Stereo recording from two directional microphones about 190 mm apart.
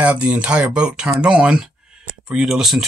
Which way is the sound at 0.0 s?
5° right (ahead or behind).